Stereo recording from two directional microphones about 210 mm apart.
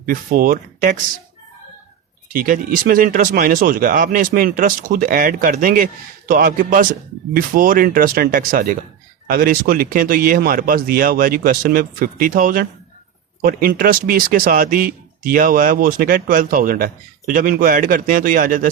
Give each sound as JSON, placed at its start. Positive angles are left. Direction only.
{"t": 0.0, "sound": "speech", "side_deg": -40}
{"t": 2.3, "sound": "speech", "side_deg": -40}